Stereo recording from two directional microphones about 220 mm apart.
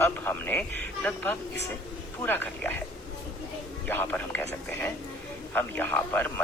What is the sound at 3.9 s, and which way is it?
A man's voice, 10° left (ahead or behind).